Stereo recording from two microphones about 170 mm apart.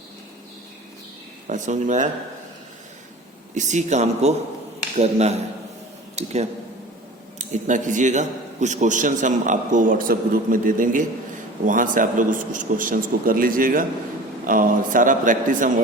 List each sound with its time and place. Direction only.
1.5 s a man's voice: 45° right (ahead or behind)
3.5 s a man's voice: 45° right (ahead or behind)